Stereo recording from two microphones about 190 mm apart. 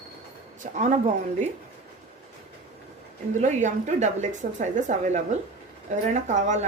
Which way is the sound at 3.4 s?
40° right (ahead or behind).